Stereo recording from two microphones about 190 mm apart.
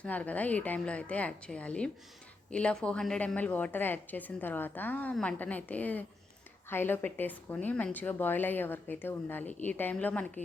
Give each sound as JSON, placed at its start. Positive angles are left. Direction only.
{"t": 0.0, "sound": "a woman's voice", "side_deg": 10}